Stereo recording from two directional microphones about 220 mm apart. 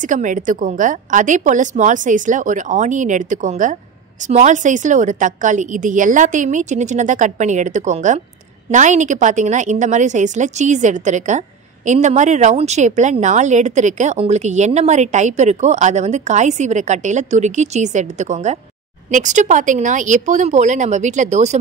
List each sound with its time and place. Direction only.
0.0 s a woman's voice: 35° right (ahead or behind)